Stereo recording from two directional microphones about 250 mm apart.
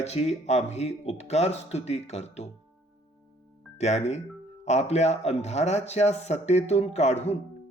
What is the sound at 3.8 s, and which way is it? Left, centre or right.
Speech, left.